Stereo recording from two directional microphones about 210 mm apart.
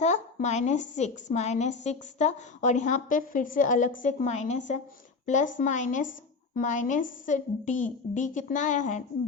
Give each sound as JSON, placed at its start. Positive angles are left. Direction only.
{"t": 0.0, "sound": "a woman's voice", "side_deg": 35}